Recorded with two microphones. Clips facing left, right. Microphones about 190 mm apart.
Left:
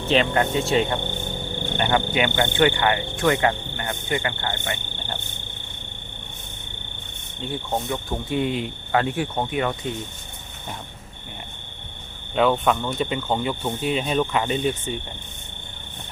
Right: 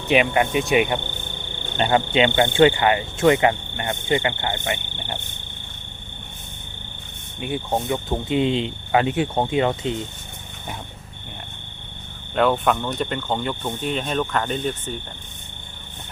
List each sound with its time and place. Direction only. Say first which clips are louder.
0.1 s cricket: right 2 dB; 15° right (ahead or behind)
7.3 s cricket: right 3 dB; 15° right (ahead or behind)
12.3 s speech: even; centre (ahead or behind)